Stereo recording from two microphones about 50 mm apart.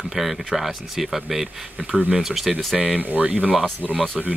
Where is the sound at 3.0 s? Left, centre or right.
Right.